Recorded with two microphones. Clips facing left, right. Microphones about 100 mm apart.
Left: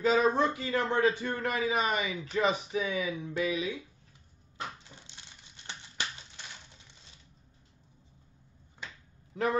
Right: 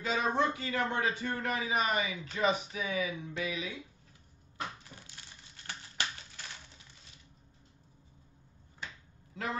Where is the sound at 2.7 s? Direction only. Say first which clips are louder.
Left 3 dB; 30° left (ahead or behind).